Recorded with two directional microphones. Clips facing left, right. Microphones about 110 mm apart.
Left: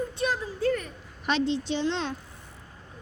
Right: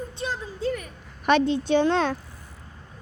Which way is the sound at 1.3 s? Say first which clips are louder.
Right 6 dB; 55° right (ahead or behind).